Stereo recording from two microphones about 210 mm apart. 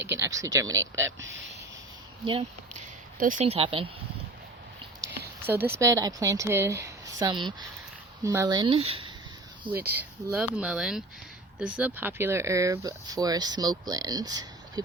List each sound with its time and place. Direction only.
0.0 s speech: 15° right (ahead or behind)
2.2 s speech: 30° right (ahead or behind)
5.5 s speech: 10° right (ahead or behind); by 9.1 s 25° right (ahead or behind)
9.7 s speech: 10° right (ahead or behind)